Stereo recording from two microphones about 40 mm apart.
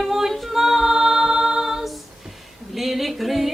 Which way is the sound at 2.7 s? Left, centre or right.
Centre.